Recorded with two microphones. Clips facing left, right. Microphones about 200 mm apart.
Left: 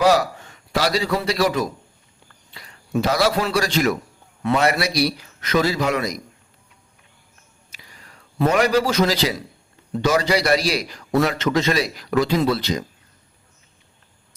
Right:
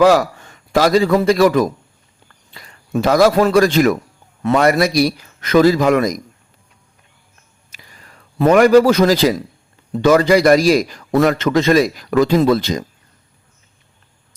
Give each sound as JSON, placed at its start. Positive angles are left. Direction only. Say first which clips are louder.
{"t": 0.0, "sound": "a man's voice", "louder": "right 5 dB", "side_deg": -50}
{"t": 8.4, "sound": "a man's voice", "louder": "right 8 dB", "side_deg": -50}